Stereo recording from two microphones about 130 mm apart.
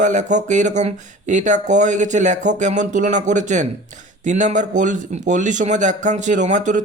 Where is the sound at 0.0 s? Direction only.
70° right (ahead or behind).